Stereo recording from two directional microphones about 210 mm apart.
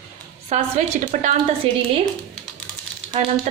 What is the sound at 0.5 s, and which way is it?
Speech, 35° right (ahead or behind).